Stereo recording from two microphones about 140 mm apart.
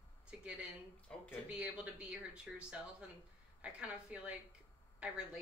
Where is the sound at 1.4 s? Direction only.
10° right (ahead or behind).